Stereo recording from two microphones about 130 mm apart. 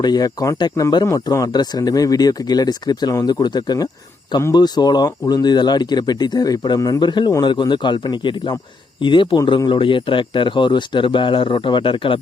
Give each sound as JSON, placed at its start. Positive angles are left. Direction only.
{"t": 0.0, "sound": "speech", "side_deg": 30}